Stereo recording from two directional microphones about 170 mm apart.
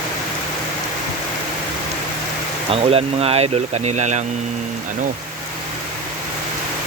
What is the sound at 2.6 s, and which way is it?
Speech, 35° right (ahead or behind).